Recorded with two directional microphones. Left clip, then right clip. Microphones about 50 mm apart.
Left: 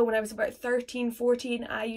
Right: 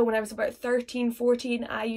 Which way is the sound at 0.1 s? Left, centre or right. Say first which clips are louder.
Right 1 dB; right.